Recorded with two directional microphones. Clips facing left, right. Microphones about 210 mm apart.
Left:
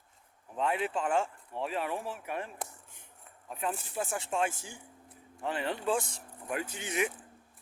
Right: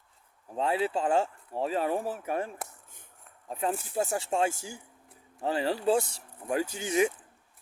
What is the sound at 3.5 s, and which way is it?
Speech, 35° right (ahead or behind).